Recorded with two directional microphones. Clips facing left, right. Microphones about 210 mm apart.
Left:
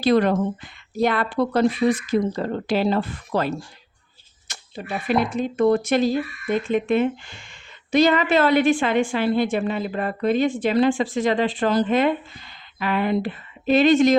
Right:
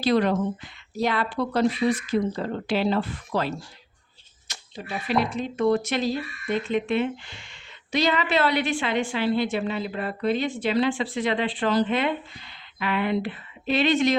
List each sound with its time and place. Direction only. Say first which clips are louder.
0.0 s a woman's voice: left 3 dB; 50° left (ahead or behind)